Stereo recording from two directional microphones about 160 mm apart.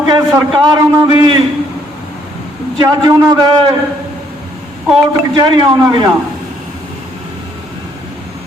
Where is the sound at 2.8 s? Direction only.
25° right (ahead or behind).